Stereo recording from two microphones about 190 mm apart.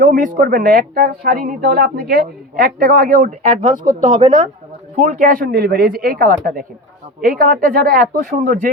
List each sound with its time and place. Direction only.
0.0 s speech: 45° right (ahead or behind)
4.0 s speech: 25° right (ahead or behind)
5.0 s speech: 45° right (ahead or behind)